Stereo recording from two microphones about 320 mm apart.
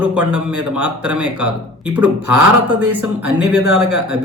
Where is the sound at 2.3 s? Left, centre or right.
Right.